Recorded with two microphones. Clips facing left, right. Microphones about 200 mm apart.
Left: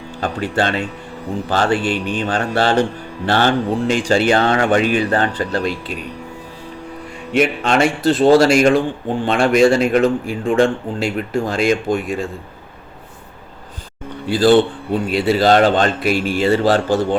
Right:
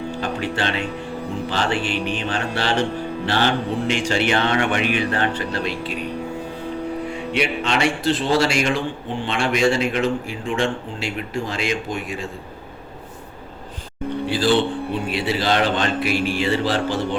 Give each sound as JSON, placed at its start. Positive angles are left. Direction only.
{"t": 0.2, "sound": "a man's voice", "side_deg": 45}
{"t": 7.3, "sound": "speech", "side_deg": 50}
{"t": 14.3, "sound": "speech", "side_deg": 45}